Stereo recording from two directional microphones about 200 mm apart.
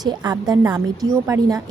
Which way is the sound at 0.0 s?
20° right (ahead or behind).